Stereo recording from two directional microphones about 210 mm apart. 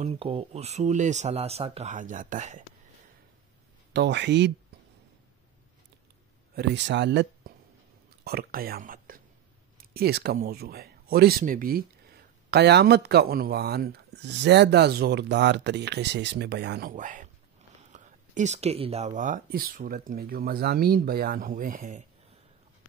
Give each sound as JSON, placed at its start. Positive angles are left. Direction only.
{"t": 0.0, "sound": "speech", "side_deg": -25}
{"t": 3.9, "sound": "speech", "side_deg": -55}
{"t": 6.5, "sound": "speech", "side_deg": -55}
{"t": 16.9, "sound": "speech", "side_deg": -40}